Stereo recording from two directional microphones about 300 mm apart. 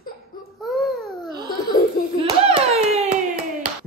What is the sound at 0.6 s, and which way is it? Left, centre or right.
Baby cry, centre.